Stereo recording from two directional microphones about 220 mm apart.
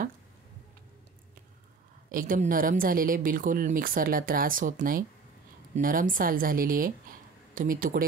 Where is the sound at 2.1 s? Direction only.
40° right (ahead or behind).